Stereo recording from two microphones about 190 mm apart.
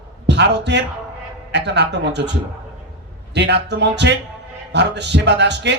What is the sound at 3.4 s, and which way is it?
A man's voice, 65° right (ahead or behind).